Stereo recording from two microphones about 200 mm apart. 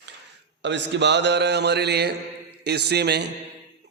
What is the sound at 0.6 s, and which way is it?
A man's voice, 60° right (ahead or behind).